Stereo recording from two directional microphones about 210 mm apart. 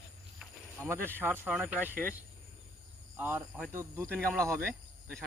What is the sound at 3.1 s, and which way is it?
Speech, 10° right (ahead or behind).